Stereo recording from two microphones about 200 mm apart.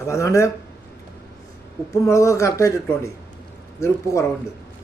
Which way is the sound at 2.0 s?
15° left (ahead or behind).